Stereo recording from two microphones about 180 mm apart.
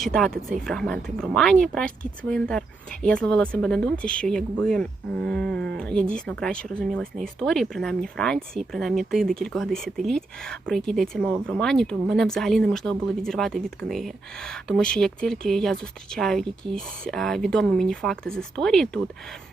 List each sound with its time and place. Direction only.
0.0 s speech: 5° left (ahead or behind)